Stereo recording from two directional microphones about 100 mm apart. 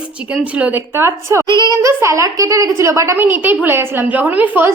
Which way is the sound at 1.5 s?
50° right (ahead or behind).